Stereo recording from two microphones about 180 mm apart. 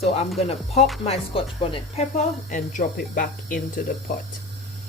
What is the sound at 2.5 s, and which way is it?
Speech, 45° left (ahead or behind).